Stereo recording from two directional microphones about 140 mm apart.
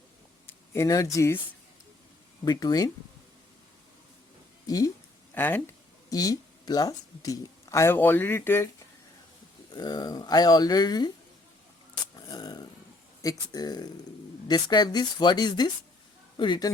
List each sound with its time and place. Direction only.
0.4 s speech: 20° left (ahead or behind)
2.4 s speech: 30° left (ahead or behind)
4.6 s speech: 25° left (ahead or behind)
5.3 s speech: 15° left (ahead or behind)
6.1 s speech: 25° left (ahead or behind)
9.7 s speech: 30° left (ahead or behind)
12.1 s a sound: 30° left (ahead or behind)
13.2 s speech: 25° left (ahead or behind)